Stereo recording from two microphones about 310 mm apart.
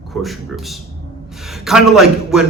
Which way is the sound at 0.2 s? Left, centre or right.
Centre.